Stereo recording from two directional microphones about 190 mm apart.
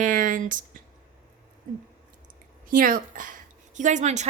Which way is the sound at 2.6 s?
45° right (ahead or behind).